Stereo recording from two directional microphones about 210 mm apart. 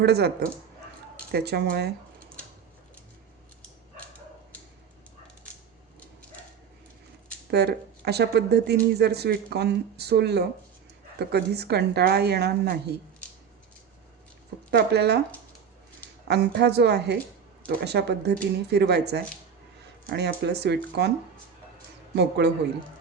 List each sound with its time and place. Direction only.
0.0 s speech: 50° right (ahead or behind)
7.5 s speech: 50° right (ahead or behind)
14.7 s speech: 50° right (ahead or behind)
16.2 s speech: 50° right (ahead or behind)
22.1 s speech: 55° right (ahead or behind)